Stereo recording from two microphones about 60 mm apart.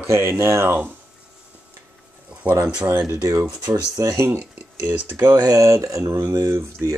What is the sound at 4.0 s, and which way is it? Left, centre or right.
Speech, right.